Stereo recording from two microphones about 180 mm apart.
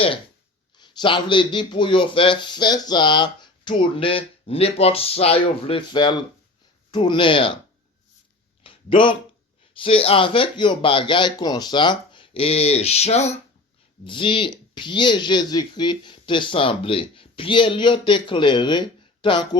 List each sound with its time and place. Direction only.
0.8 s speech: 25° left (ahead or behind)
8.6 s a sound: 30° left (ahead or behind)
9.7 s speech: 30° left (ahead or behind)